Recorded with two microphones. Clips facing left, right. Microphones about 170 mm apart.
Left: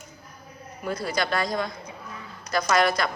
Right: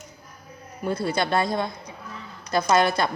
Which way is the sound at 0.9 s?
25° right (ahead or behind).